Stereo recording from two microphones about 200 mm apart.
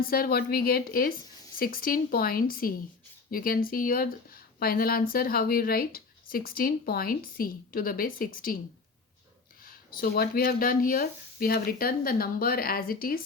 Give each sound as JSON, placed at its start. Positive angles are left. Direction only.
{"t": 0.0, "sound": "speech", "side_deg": 50}
{"t": 9.6, "sound": "speech", "side_deg": 50}